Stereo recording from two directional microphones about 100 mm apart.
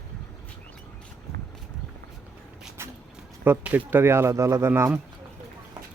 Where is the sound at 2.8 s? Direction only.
25° right (ahead or behind).